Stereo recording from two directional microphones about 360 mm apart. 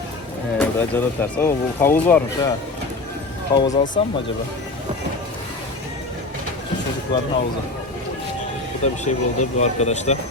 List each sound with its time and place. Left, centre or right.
0.6 s speech: centre
3.5 s speech: centre
9.0 s speech: centre